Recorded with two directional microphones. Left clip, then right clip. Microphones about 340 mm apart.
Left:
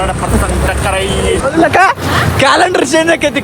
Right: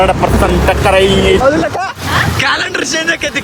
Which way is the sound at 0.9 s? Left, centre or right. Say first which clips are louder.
Right 6 dB; right.